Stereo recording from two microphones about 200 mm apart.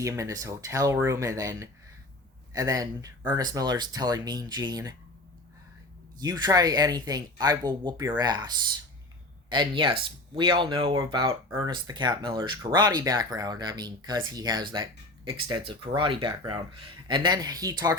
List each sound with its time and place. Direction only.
0.0 s speech: 15° right (ahead or behind)
6.1 s speech: 20° right (ahead or behind)